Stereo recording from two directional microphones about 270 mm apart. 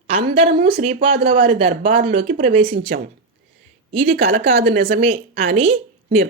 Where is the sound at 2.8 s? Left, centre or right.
Right.